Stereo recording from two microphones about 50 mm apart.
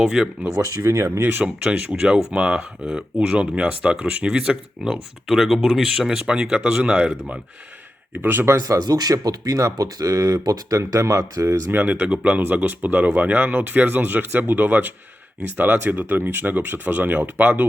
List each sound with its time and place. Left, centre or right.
0.0 s speech: centre
0.5 s speech: right
1.2 s speech: right
1.6 s speech: right
8.1 s speech: right
8.4 s speech: right
11.7 s speech: right